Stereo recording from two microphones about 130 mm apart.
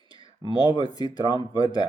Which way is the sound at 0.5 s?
35° left (ahead or behind).